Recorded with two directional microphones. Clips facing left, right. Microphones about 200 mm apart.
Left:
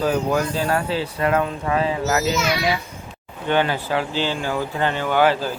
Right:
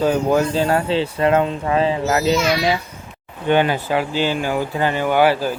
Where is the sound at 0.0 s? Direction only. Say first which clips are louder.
Right 4 dB; 25° right (ahead or behind).